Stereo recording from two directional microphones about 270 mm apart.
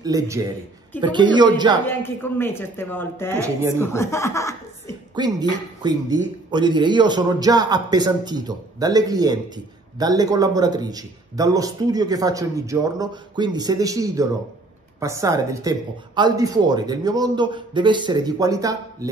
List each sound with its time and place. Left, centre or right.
0.0 s a man's voice: centre
1.9 s speech: centre
3.3 s a man's voice: centre
3.7 s speech: centre
5.1 s a man's voice: centre